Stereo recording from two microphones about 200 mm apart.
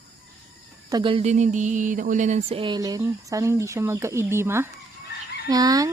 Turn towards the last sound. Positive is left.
turn(degrees=-20)  # may be behind; listen again after turning